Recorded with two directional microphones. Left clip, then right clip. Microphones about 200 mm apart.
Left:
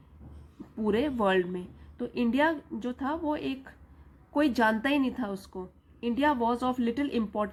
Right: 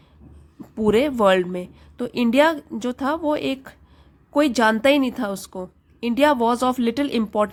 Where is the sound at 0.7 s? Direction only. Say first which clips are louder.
Right 10 dB; 35° right (ahead or behind).